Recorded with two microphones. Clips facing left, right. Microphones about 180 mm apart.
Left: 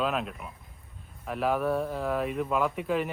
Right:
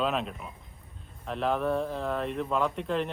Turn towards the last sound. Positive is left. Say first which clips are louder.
# left 1 dB
turn(degrees=5)  # may be behind; listen again after turning